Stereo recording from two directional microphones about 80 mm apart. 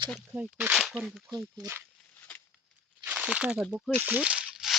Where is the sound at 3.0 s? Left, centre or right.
Centre.